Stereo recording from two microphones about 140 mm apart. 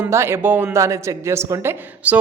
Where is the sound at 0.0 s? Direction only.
20° right (ahead or behind).